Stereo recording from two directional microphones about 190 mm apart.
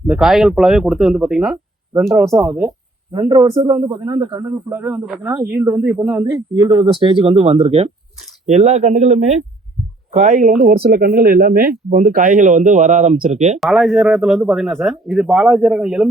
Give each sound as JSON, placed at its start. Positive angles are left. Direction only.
{"t": 0.1, "sound": "a man's voice", "side_deg": 0}
{"t": 2.0, "sound": "a man's voice", "side_deg": -10}
{"t": 3.1, "sound": "a man's voice", "side_deg": -25}
{"t": 13.6, "sound": "a man's voice", "side_deg": 0}